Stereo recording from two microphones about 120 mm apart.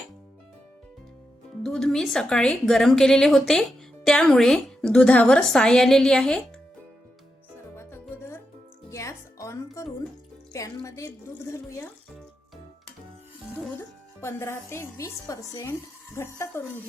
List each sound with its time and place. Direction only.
1.6 s a woman's voice: 5° left (ahead or behind)
7.8 s music: 20° left (ahead or behind)
10.8 s speech: 25° left (ahead or behind)
13.7 s speech: 20° left (ahead or behind)